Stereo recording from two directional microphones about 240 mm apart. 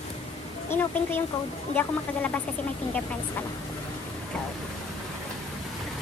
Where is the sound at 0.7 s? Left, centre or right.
Centre.